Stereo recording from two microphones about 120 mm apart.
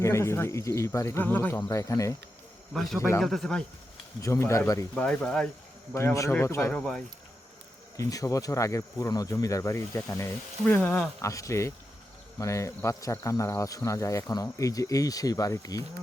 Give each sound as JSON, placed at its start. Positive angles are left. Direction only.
{"t": 0.0, "sound": "speech", "side_deg": 25}
{"t": 2.7, "sound": "a man's voice", "side_deg": 5}
{"t": 4.2, "sound": "speech", "side_deg": 25}
{"t": 4.9, "sound": "speech", "side_deg": 10}
{"t": 5.9, "sound": "speech", "side_deg": 20}
{"t": 6.7, "sound": "a man's voice", "side_deg": 5}
{"t": 7.9, "sound": "speech", "side_deg": 25}
{"t": 11.2, "sound": "speech", "side_deg": 25}